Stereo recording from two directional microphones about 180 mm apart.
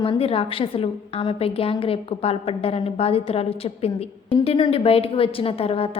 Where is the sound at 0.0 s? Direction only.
30° left (ahead or behind).